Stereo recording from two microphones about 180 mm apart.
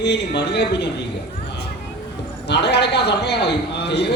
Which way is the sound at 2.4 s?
70° left (ahead or behind).